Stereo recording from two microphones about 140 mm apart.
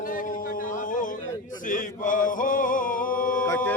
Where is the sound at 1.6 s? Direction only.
70° left (ahead or behind).